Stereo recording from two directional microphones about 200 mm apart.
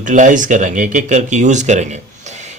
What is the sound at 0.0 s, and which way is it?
Speech, 40° right (ahead or behind).